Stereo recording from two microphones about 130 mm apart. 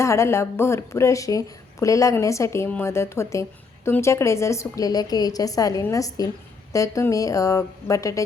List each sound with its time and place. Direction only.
0.0 s a woman's voice: 20° left (ahead or behind)